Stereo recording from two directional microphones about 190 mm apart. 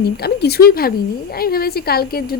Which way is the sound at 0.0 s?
55° left (ahead or behind).